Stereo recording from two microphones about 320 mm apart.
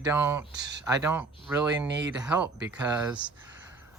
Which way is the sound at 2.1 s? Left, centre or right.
Centre.